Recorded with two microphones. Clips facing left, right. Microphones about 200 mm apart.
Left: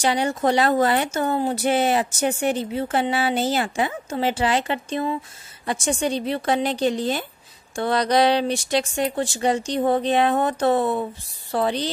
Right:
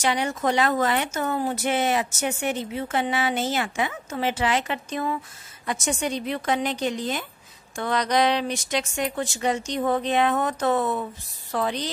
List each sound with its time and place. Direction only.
0.0 s speech: 30° left (ahead or behind)